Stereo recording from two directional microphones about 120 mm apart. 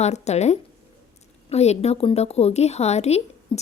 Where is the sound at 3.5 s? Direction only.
45° left (ahead or behind).